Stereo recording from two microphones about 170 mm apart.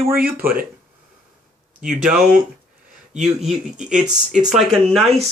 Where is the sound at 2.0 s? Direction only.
5° right (ahead or behind).